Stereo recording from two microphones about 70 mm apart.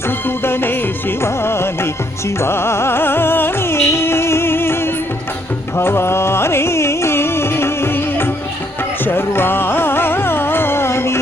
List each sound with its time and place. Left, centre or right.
0.3 s music: left
9.0 s carnatic music: left